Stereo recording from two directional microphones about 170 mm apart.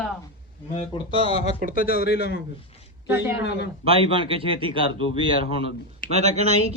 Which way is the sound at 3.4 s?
80° left.